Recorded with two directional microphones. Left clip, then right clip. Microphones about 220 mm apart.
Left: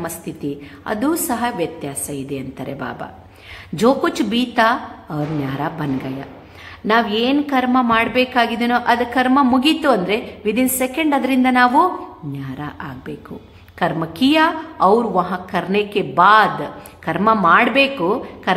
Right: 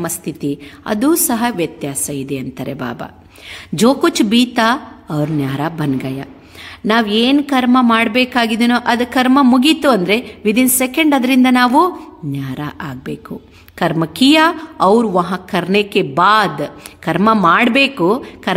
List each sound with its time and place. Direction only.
0.0 s a woman's voice: 45° right (ahead or behind)